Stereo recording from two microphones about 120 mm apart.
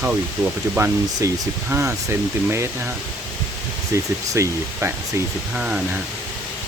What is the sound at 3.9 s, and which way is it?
Speech, 25° right (ahead or behind).